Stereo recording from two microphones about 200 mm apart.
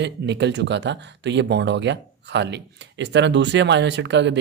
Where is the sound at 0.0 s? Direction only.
60° right (ahead or behind).